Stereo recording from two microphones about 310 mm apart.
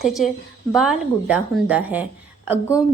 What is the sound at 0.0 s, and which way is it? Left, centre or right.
A woman's voice, centre.